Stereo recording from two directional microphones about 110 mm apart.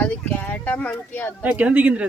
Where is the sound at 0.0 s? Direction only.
15° left (ahead or behind).